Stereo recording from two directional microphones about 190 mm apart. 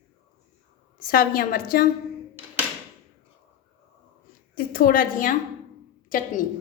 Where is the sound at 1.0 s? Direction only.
50° left (ahead or behind).